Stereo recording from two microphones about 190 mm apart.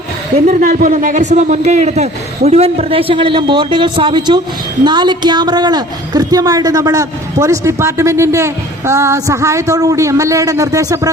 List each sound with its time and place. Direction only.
0.4 s a man's voice: 45° right (ahead or behind); by 11.1 s 15° right (ahead or behind)